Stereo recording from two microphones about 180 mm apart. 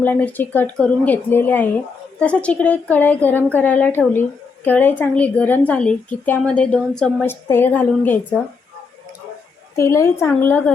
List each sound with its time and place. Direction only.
0.0 s a woman's voice: 10° left (ahead or behind)
9.7 s a woman's voice: 15° left (ahead or behind)